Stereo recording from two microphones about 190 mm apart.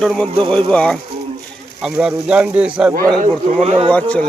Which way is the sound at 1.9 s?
5° right (ahead or behind).